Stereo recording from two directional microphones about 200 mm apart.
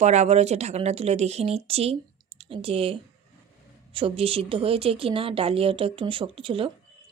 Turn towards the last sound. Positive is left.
turn(degrees=-25)  # may be behind; listen again after turning